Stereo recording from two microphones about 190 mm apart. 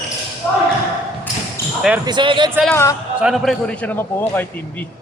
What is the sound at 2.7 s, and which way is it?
Speech, 15° left (ahead or behind).